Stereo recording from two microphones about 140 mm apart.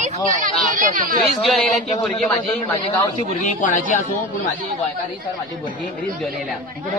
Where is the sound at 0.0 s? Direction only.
65° right (ahead or behind).